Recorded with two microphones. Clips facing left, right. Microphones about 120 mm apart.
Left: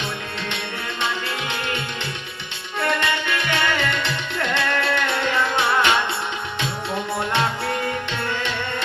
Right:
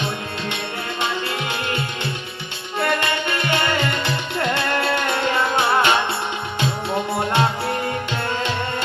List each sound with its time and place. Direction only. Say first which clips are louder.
3.0 s music: right 1 dB; 40° right (ahead or behind)
5.0 s music: right 2 dB; 20° right (ahead or behind)